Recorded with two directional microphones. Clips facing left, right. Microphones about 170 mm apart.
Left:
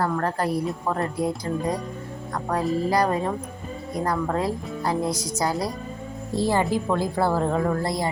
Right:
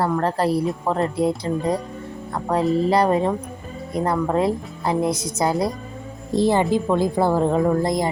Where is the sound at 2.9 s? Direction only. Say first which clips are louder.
Right 4 dB; 25° right (ahead or behind).